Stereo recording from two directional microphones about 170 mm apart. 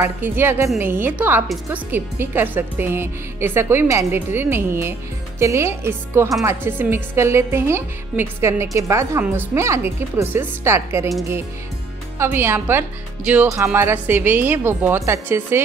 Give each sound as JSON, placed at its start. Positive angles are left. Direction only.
{"t": 0.0, "sound": "a woman's voice", "side_deg": -15}
{"t": 12.2, "sound": "a woman's voice", "side_deg": -15}